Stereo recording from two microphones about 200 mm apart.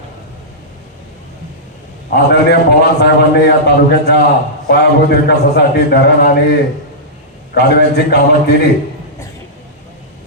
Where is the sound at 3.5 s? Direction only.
55° left (ahead or behind).